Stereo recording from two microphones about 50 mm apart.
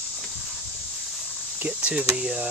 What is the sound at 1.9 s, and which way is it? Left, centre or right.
Speech, centre.